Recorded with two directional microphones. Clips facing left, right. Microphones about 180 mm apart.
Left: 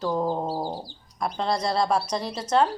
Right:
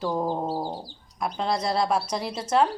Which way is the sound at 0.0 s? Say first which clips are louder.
Left 1 dB; 10° right (ahead or behind).